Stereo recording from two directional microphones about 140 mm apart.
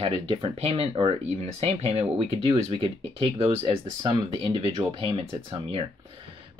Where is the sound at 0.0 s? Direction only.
35° right (ahead or behind).